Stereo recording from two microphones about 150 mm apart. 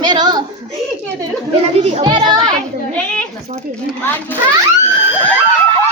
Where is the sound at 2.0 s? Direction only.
30° right (ahead or behind).